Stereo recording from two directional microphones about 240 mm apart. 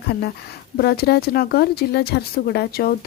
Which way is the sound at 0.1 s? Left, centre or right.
Left.